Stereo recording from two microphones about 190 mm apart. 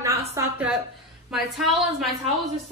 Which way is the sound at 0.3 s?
10° right (ahead or behind).